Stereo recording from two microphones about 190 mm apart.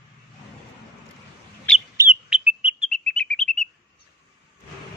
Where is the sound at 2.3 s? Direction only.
5° right (ahead or behind).